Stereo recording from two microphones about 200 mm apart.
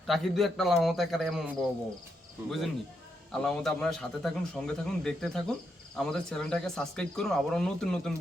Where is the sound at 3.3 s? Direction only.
5° left (ahead or behind).